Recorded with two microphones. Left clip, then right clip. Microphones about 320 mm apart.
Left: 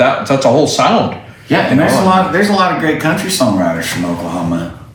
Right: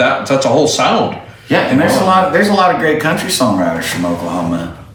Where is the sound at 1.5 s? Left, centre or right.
Centre.